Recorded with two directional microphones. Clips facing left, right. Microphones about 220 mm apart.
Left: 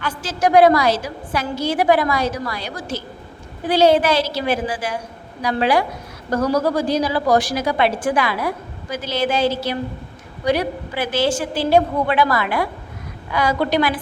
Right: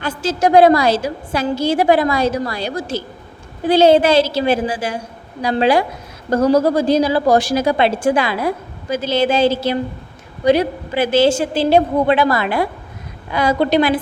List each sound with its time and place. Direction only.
0.0 s a woman's voice: 25° right (ahead or behind)